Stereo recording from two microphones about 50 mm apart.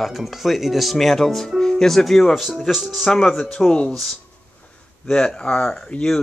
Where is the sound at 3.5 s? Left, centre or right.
Centre.